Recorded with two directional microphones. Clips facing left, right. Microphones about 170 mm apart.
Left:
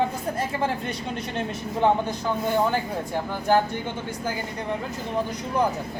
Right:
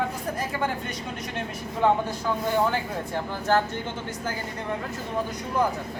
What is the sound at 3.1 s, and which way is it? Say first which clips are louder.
Speech: left 2 dB; 15° left (ahead or behind).